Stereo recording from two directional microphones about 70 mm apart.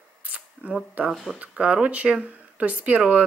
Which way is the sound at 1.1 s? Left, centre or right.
Centre.